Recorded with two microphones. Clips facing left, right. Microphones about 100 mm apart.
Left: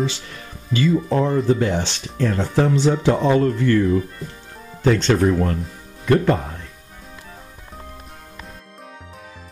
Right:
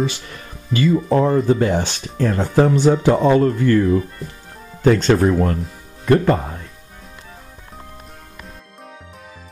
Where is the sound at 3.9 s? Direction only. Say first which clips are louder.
Right 2 dB; centre (ahead or behind).